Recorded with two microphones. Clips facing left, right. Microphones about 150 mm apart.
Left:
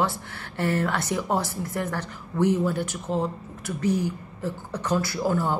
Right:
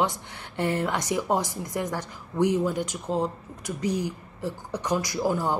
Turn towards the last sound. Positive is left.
turn(degrees=-15)  # may be behind; listen again after turning